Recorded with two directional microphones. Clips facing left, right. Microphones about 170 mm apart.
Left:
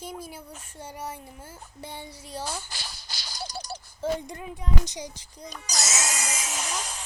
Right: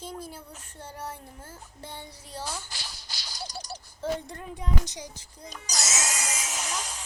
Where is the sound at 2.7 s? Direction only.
55° left (ahead or behind).